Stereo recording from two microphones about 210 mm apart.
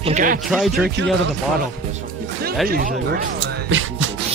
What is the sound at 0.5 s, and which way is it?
Speech, 5° right (ahead or behind).